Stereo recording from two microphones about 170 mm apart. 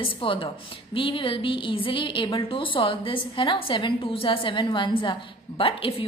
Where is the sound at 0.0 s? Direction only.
30° left (ahead or behind).